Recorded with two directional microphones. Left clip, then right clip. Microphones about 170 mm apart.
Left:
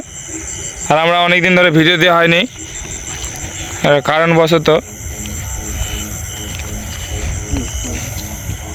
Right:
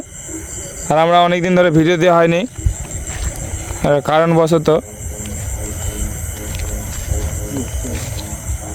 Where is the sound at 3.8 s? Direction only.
5° right (ahead or behind).